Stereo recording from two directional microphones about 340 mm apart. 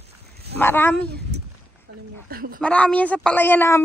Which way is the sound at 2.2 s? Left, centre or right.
Right.